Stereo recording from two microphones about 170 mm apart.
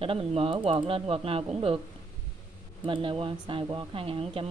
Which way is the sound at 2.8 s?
30° right (ahead or behind).